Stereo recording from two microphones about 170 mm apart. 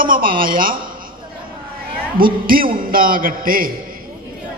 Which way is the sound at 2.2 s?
55° right (ahead or behind).